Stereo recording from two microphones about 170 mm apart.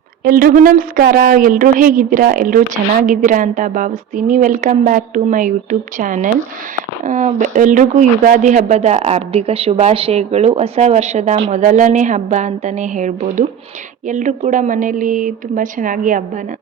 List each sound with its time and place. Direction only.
0.3 s a woman's voice: 60° right (ahead or behind)